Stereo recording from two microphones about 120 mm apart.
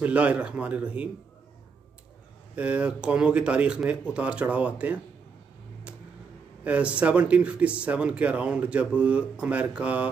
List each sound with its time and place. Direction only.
0.0 s speech: 10° right (ahead or behind)
2.5 s speech: 10° right (ahead or behind)
6.6 s speech: 10° right (ahead or behind)